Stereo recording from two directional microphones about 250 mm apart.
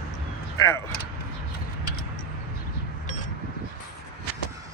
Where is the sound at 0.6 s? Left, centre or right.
Centre.